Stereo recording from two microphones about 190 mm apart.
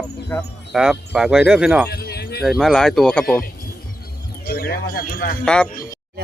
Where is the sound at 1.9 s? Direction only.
55° left (ahead or behind).